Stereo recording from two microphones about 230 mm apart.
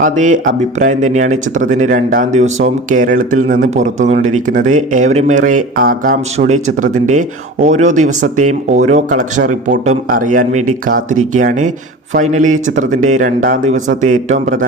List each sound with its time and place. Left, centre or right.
0.0 s speech: right